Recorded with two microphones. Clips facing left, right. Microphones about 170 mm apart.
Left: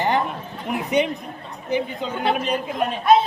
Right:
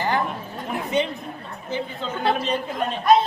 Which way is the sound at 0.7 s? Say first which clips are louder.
Left 3 dB; 15° left (ahead or behind).